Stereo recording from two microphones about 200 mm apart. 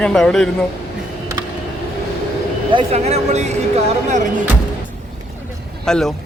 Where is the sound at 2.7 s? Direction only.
30° right (ahead or behind).